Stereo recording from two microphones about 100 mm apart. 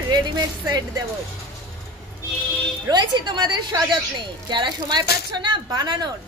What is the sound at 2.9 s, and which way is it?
A woman's voice, 45° right (ahead or behind).